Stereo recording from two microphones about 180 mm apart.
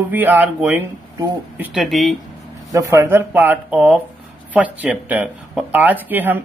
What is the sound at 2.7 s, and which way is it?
Speech, 15° right (ahead or behind).